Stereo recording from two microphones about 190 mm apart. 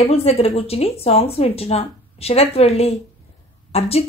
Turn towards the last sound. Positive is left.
turn(degrees=35)  # may be behind; listen again after turning